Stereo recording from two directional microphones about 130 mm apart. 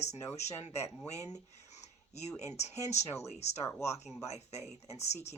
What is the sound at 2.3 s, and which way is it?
Speech, 60° left (ahead or behind).